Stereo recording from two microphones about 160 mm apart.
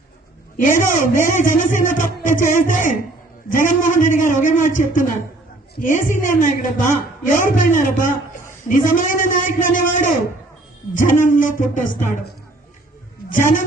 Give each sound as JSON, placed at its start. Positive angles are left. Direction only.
{"t": 0.6, "sound": "a woman's voice", "side_deg": 55}
{"t": 13.3, "sound": "a woman's voice", "side_deg": 55}